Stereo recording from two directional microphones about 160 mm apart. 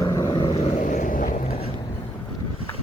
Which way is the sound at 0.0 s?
20° left (ahead or behind).